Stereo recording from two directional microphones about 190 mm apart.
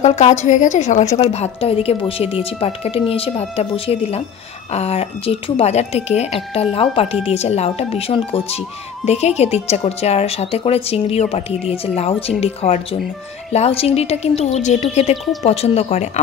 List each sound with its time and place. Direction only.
0.0 s speech: 35° left (ahead or behind)